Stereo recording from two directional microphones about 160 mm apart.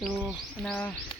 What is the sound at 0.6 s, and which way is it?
Speech, 10° left (ahead or behind).